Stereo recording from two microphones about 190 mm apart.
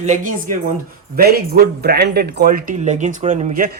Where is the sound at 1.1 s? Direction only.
55° right (ahead or behind).